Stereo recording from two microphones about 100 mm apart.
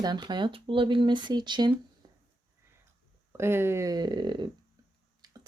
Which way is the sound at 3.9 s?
45° right (ahead or behind).